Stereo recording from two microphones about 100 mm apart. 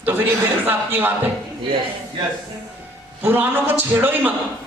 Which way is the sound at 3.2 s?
20° right (ahead or behind).